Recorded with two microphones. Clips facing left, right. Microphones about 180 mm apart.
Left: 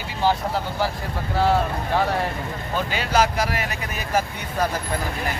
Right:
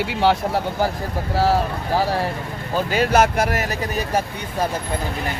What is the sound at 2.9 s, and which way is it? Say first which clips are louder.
Speech: right 5 dB; 50° right (ahead or behind).